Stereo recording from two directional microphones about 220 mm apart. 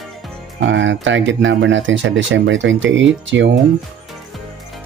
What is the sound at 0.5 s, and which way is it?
Speech, 55° right (ahead or behind).